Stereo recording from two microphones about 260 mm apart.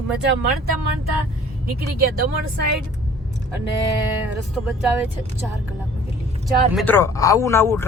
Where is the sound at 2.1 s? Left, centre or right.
Right.